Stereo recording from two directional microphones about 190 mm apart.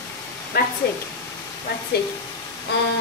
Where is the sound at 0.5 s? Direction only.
55° left (ahead or behind).